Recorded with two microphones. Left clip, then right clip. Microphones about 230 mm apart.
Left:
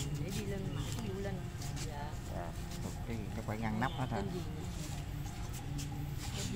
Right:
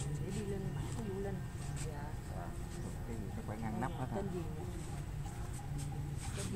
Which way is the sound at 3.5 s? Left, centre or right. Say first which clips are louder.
Left 5 dB; left.